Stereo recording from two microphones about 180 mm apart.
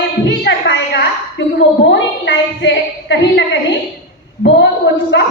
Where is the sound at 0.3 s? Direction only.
80° left.